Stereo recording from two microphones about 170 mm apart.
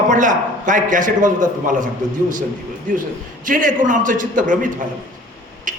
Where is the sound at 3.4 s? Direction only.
50° right (ahead or behind).